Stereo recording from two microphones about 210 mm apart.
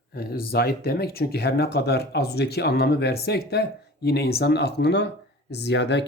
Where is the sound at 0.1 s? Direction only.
45° left (ahead or behind).